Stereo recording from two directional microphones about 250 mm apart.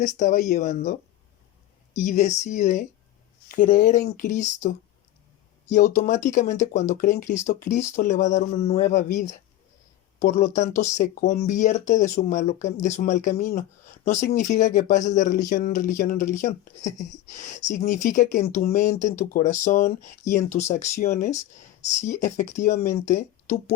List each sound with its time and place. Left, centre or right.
0.0 s speech: left
2.0 s speech: left
10.2 s speech: left